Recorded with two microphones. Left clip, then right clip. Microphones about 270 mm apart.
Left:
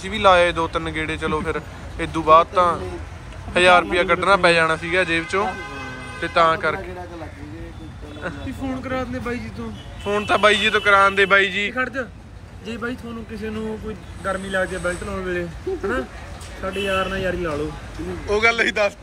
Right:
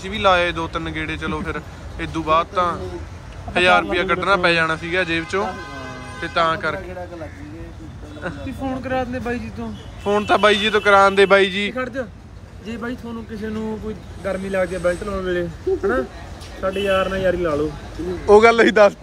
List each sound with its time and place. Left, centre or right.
0.0 s speech: centre
8.8 s speech: right
10.0 s speech: centre
11.8 s speech: right
14.2 s speech: right